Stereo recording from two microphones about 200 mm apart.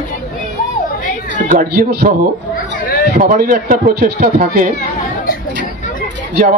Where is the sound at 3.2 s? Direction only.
40° right (ahead or behind).